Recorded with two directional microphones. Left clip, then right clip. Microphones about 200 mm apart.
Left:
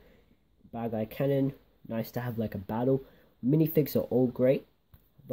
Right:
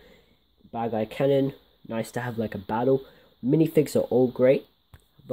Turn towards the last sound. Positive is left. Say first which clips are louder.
# right 6 dB
turn(degrees=-5)  # may be behind; listen again after turning